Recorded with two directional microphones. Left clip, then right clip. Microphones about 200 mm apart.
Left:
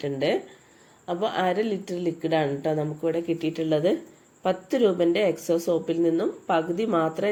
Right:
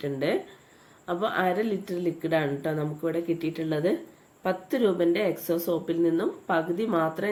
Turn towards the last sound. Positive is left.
turn(degrees=5)  # may be behind; listen again after turning